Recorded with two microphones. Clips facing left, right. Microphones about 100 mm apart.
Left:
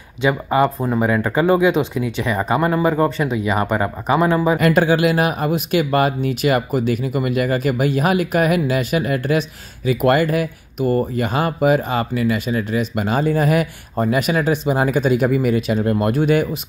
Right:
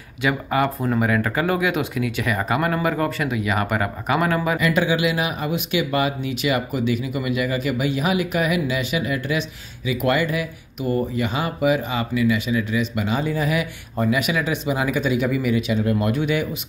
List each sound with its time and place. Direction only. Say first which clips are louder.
0.2 s speech: left 4 dB; 25° left (ahead or behind)
4.6 s speech: left 5 dB; 50° left (ahead or behind)